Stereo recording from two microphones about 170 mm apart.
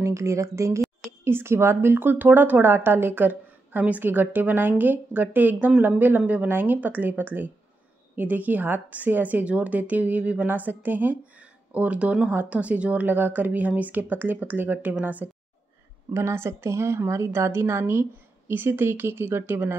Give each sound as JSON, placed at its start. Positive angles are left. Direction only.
{"t": 0.0, "sound": "a woman's voice", "side_deg": -15}